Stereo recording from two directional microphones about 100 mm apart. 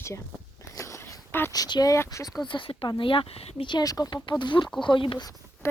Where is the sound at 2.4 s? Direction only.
55° left (ahead or behind); by 3.6 s 80° left.